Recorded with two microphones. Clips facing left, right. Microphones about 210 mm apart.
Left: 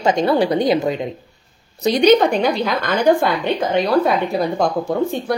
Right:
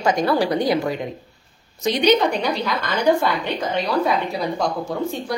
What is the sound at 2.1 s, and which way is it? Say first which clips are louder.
Speech: left 4 dB; 50° left (ahead or behind).